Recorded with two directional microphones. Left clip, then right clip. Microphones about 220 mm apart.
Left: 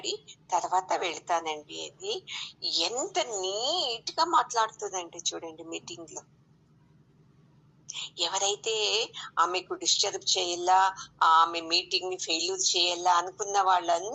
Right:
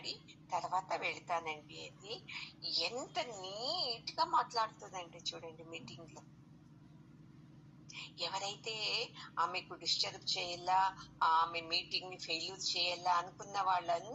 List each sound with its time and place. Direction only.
0.4 s a woman's voice: 45° left (ahead or behind)
8.1 s a woman's voice: 45° left (ahead or behind)